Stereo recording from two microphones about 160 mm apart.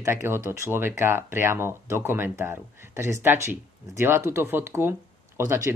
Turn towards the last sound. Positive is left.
turn(degrees=-15)  # may be behind; listen again after turning